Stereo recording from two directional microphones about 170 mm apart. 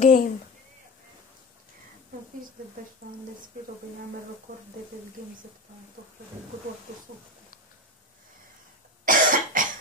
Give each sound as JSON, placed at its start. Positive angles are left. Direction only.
{"t": 0.0, "sound": "speech", "side_deg": 50}
{"t": 9.0, "sound": "cough", "side_deg": -50}